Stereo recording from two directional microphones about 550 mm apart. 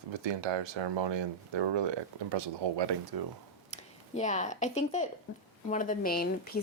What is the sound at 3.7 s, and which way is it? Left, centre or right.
A woman's voice, centre.